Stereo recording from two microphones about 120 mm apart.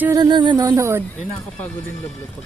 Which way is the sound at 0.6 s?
25° right (ahead or behind).